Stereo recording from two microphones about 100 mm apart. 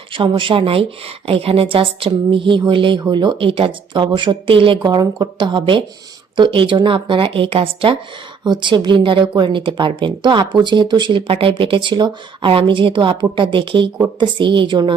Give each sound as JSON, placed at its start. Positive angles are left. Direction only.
{"t": 0.1, "sound": "speech", "side_deg": -60}
{"t": 4.8, "sound": "a woman's voice", "side_deg": -45}
{"t": 8.4, "sound": "a woman's voice", "side_deg": -50}
{"t": 12.5, "sound": "a woman's voice", "side_deg": -65}